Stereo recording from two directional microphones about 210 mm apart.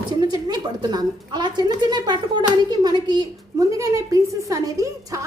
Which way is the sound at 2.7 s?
20° right (ahead or behind).